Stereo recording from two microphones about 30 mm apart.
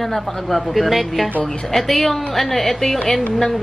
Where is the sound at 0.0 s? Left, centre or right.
Centre.